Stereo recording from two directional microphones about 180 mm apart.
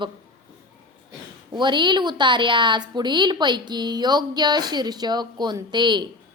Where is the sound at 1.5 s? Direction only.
25° right (ahead or behind).